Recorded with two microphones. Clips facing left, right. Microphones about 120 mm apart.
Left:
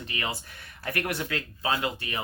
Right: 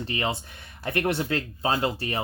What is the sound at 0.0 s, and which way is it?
Speech, 30° right (ahead or behind).